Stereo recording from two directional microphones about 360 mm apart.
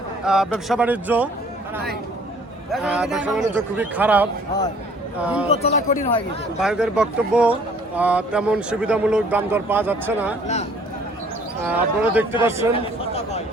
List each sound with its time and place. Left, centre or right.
0.3 s speech: centre
2.7 s speech: centre
5.5 s speech: centre
6.6 s speech: centre
10.4 s speech: centre
11.6 s speech: centre
12.7 s a sound: centre